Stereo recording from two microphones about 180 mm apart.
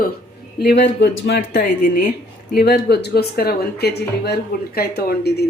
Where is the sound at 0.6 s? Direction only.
65° left (ahead or behind).